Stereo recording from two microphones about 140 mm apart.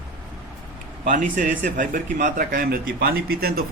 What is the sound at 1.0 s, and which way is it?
A man's voice, 70° right (ahead or behind).